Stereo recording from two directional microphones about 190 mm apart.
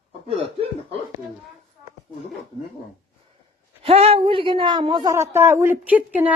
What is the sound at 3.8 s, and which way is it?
A woman's voice, 30° right (ahead or behind).